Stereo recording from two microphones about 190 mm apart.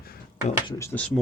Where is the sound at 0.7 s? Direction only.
15° left (ahead or behind).